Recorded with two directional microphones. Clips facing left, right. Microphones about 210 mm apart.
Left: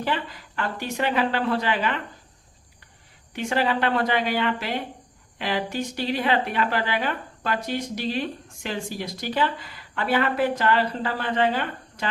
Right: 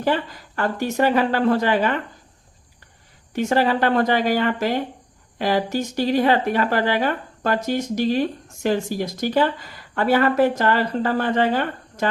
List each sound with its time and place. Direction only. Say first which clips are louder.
0.0 s speech: right 6 dB; 45° right (ahead or behind)
3.3 s speech: right 5 dB; 40° right (ahead or behind)